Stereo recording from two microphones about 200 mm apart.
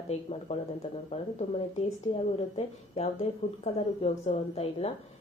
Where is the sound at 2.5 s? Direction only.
30° left (ahead or behind).